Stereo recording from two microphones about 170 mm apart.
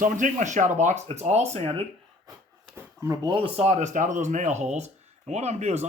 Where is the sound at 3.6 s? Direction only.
40° right (ahead or behind).